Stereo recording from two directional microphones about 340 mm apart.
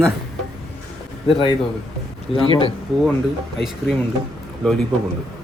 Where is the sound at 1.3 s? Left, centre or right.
Centre.